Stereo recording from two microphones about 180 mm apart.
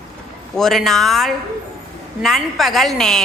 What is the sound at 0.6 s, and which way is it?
A woman's voice, centre (ahead or behind).